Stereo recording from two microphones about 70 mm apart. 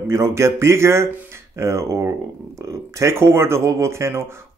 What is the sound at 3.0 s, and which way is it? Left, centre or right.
A man's voice, right.